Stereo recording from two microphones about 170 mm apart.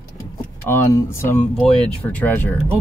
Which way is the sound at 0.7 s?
15° left (ahead or behind).